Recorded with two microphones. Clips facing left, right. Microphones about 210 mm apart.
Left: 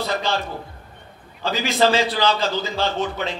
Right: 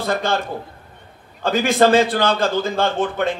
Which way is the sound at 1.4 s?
50° right (ahead or behind).